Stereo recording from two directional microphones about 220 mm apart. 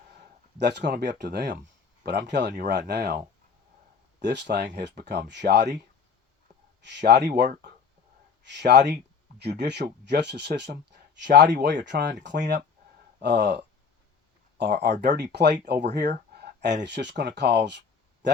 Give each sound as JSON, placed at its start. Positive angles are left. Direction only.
{"t": 0.6, "sound": "speech", "side_deg": -50}
{"t": 6.8, "sound": "speech", "side_deg": -50}
{"t": 13.2, "sound": "speech", "side_deg": -50}
{"t": 14.6, "sound": "speech", "side_deg": -50}
{"t": 16.0, "sound": "a sound", "side_deg": -50}
{"t": 16.8, "sound": "speech", "side_deg": -50}